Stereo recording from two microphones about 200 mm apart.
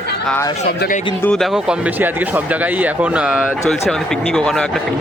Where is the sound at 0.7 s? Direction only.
50° left (ahead or behind).